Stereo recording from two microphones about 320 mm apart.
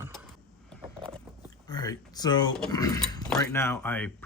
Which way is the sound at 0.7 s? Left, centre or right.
Centre.